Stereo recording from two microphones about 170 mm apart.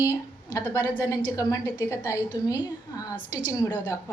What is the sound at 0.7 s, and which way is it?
A woman's voice, 20° left (ahead or behind).